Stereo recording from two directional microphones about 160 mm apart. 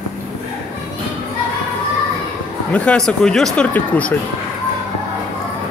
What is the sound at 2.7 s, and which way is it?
Speech, 5° left (ahead or behind).